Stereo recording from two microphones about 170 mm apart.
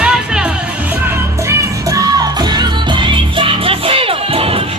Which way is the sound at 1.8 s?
20° right (ahead or behind).